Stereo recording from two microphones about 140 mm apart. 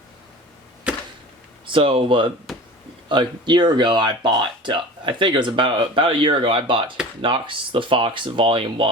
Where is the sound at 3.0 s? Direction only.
35° right (ahead or behind).